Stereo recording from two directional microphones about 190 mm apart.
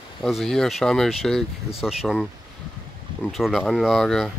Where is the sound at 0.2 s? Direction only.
Centre (ahead or behind).